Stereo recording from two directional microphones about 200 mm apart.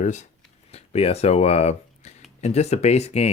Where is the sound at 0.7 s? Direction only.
30° left (ahead or behind).